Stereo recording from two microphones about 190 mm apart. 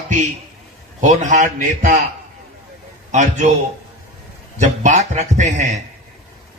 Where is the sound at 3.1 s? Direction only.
40° right (ahead or behind).